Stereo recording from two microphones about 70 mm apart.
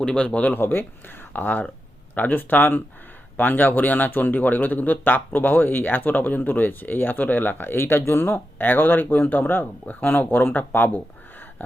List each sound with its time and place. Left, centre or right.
0.0 s speech: centre
0.6 s a man's voice: left